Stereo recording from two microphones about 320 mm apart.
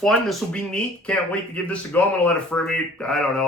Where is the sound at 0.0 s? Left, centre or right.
Centre.